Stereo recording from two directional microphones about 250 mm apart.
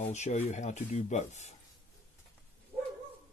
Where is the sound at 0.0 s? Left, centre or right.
Left.